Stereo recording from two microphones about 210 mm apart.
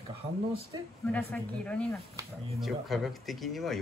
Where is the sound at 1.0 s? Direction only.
5° left (ahead or behind).